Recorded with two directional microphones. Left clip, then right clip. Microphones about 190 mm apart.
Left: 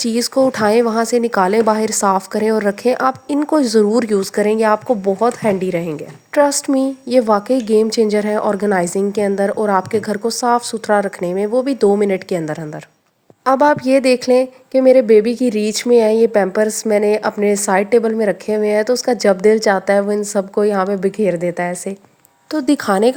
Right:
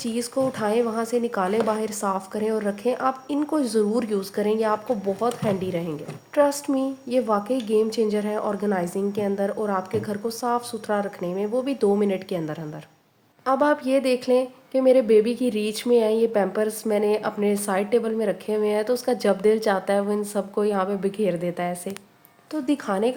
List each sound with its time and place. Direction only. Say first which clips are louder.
0.0 s a woman's voice: left 10 dB; 45° left (ahead or behind)